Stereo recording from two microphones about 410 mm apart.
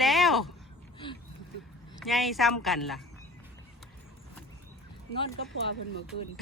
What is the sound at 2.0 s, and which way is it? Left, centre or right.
Speech, centre.